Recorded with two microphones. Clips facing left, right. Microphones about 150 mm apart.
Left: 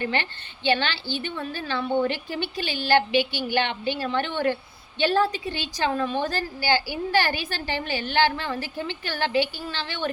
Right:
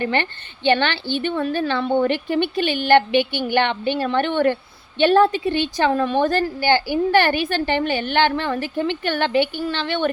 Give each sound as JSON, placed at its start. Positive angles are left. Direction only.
{"t": 0.0, "sound": "a woman's voice", "side_deg": -55}